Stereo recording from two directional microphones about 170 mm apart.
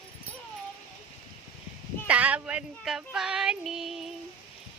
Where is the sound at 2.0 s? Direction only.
5° right (ahead or behind).